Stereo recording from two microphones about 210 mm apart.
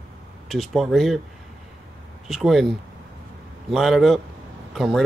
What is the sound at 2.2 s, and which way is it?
Speech, centre (ahead or behind).